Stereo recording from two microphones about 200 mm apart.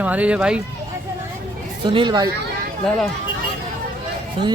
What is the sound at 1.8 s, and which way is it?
Speech, 25° right (ahead or behind).